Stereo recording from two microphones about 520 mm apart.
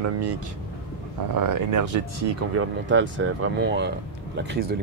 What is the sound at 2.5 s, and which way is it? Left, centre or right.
Speech, right.